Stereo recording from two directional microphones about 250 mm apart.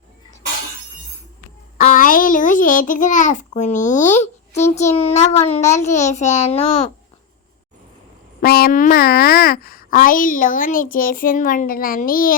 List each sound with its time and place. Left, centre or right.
1.8 s a child's voice: left
8.4 s a woman's voice: left